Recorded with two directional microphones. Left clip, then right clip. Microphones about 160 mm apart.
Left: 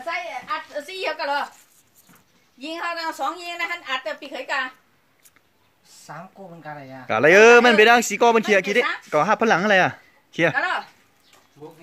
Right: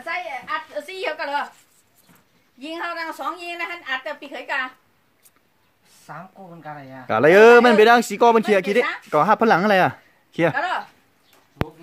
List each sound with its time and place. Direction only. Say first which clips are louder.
0.0 s a sound: even; centre (ahead or behind)
2.6 s a woman's voice: left 1 dB; centre (ahead or behind)
6.0 s speech: even; 20° left (ahead or behind)
7.1 s a man's voice: right 1 dB; 20° right (ahead or behind)
10.5 s speech: even; 45° right (ahead or behind)